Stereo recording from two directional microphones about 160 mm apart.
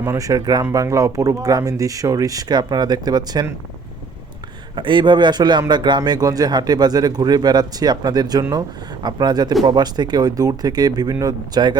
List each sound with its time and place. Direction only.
0.0 s a man's voice: 20° right (ahead or behind)
4.7 s a man's voice: 30° right (ahead or behind)